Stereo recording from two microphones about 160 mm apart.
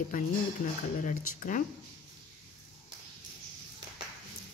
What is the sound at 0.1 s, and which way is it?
Speech, 60° left (ahead or behind).